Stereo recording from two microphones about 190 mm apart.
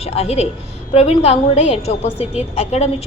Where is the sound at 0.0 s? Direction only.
30° left (ahead or behind).